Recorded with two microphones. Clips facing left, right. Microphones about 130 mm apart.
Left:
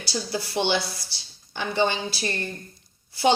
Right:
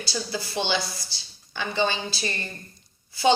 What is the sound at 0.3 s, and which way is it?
Speech, 60° left (ahead or behind).